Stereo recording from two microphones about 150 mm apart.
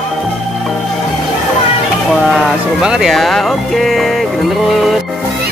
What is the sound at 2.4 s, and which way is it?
Speech, 5° right (ahead or behind).